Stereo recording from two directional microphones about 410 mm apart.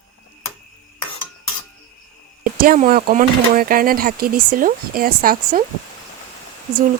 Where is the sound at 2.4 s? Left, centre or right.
Right.